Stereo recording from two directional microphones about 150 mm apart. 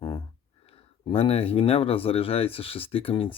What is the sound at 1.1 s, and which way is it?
Speech, 40° left (ahead or behind).